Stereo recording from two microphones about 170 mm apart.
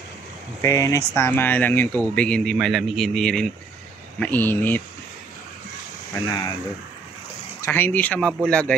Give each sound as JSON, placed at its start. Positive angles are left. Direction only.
{"t": 0.6, "sound": "speech", "side_deg": 20}
{"t": 6.1, "sound": "speech", "side_deg": 20}
{"t": 7.6, "sound": "speech", "side_deg": 10}